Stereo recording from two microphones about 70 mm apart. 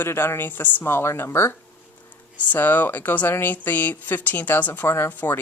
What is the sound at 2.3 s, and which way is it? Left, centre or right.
A woman's voice, left.